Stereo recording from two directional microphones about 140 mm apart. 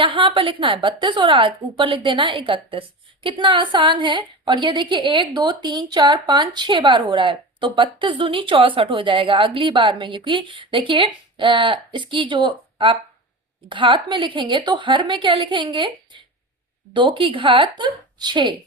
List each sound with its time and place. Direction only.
0.0 s a woman's voice: 35° right (ahead or behind)